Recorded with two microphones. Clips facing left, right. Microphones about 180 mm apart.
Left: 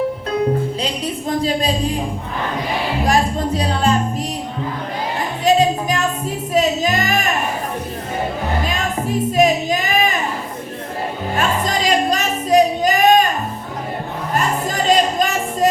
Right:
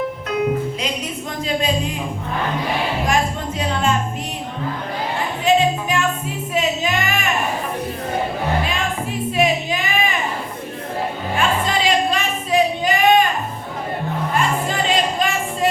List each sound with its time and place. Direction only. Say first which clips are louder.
1.3 s speech: left 3 dB; 35° left (ahead or behind)
3.0 s music: left 3 dB; 35° left (ahead or behind)
5.5 s music: left 2 dB; 40° left (ahead or behind)
8.6 s music: left 2 dB; 40° left (ahead or behind)
11.3 s a sound: even; 40° left (ahead or behind)
14.3 s music: left 2 dB; 40° left (ahead or behind)